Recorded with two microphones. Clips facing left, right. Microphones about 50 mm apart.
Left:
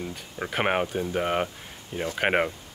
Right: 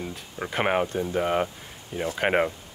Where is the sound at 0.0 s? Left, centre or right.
Centre.